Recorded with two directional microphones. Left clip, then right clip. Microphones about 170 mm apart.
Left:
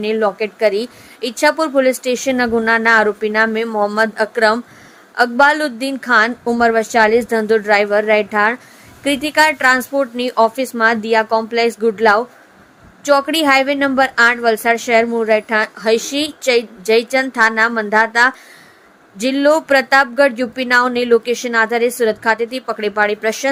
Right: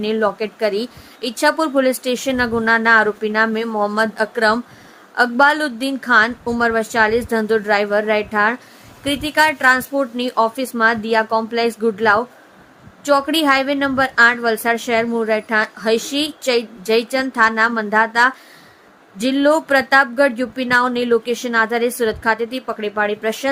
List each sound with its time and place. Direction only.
0.0 s a woman's voice: 15° left (ahead or behind)